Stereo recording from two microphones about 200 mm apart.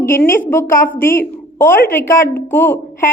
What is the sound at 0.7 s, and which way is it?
Speech, 45° left (ahead or behind).